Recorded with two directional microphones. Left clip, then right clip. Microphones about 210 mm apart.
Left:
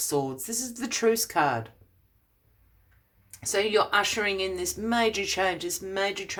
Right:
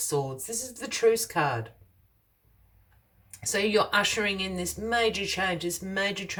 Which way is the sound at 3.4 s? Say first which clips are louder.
Left 1 dB; 25° left (ahead or behind).